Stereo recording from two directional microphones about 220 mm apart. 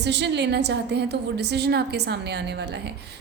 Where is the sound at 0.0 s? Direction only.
50° right (ahead or behind).